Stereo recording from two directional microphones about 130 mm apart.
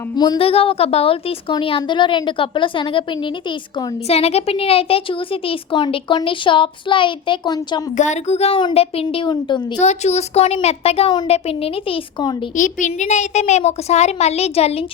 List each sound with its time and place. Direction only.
0.3 s speech: 45° left (ahead or behind)
4.1 s speech: 50° left (ahead or behind); by 7.8 s 35° left (ahead or behind)
7.9 s a woman's voice: 65° left (ahead or behind)
8.5 s a woman's voice: 45° left (ahead or behind)
9.8 s speech: 60° left (ahead or behind)
12.5 s a woman's voice: 75° left (ahead or behind); by 14.8 s 50° left (ahead or behind)